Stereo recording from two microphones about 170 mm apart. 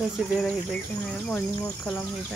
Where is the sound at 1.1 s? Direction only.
5° left (ahead or behind).